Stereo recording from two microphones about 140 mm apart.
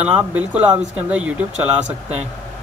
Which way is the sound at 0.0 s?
10° right (ahead or behind).